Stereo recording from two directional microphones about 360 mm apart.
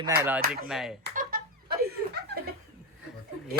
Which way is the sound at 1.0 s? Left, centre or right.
Right.